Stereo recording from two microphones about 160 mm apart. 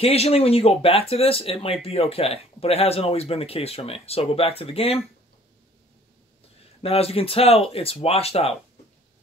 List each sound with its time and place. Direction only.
0.0 s speech: 40° left (ahead or behind)
6.8 s speech: 40° left (ahead or behind)